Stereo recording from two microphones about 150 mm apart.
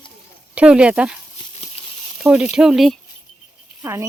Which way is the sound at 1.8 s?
40° left (ahead or behind).